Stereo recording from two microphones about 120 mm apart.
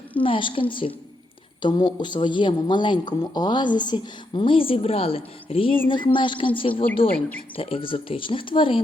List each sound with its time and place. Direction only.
0.2 s speech: 45° left (ahead or behind)